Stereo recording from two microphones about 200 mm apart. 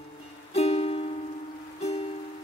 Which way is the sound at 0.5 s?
30° left (ahead or behind).